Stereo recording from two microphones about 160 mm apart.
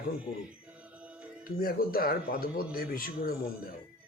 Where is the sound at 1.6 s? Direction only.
65° left (ahead or behind).